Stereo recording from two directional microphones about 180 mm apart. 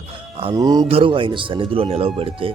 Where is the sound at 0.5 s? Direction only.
20° right (ahead or behind).